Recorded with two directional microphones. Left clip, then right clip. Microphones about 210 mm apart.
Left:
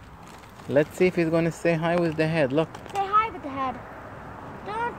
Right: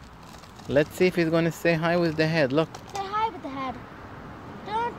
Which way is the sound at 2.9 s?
25° right (ahead or behind).